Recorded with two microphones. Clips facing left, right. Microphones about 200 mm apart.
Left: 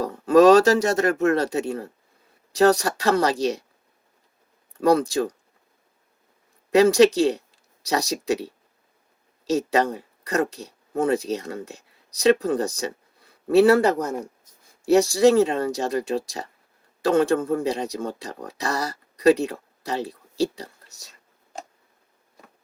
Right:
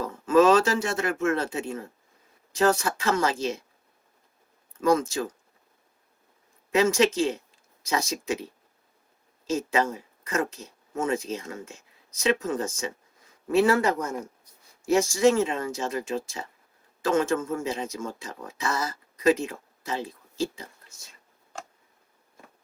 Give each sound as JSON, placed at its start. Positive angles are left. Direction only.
{"t": 0.0, "sound": "speech", "side_deg": 35}
{"t": 4.8, "sound": "speech", "side_deg": 35}
{"t": 6.7, "sound": "speech", "side_deg": 35}